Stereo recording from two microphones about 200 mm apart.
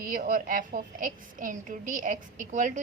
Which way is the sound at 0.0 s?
45° right (ahead or behind).